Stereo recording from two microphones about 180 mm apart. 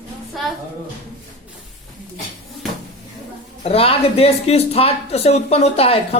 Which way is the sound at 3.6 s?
30° left (ahead or behind).